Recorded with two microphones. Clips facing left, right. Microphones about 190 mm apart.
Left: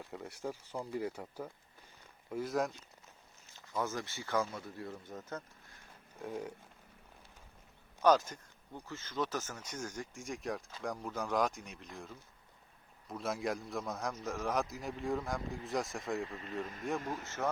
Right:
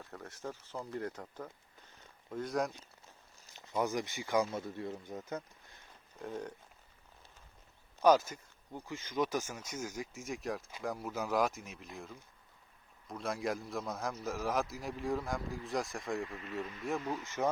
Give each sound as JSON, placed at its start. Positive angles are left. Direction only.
{"t": 0.0, "sound": "a man's voice", "side_deg": 10}
{"t": 3.5, "sound": "speech", "side_deg": -20}
{"t": 6.1, "sound": "a man's voice", "side_deg": 5}
{"t": 8.0, "sound": "a man's voice", "side_deg": -10}
{"t": 17.0, "sound": "speech", "side_deg": 45}